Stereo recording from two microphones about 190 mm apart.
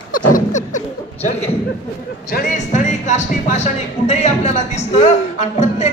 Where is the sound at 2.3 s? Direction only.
45° left (ahead or behind).